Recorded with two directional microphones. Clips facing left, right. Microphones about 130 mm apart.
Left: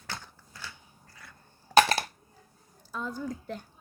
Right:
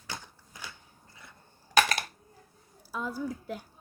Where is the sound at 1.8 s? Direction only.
30° left (ahead or behind).